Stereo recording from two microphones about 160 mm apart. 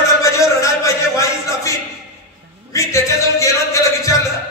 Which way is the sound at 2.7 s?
20° left (ahead or behind).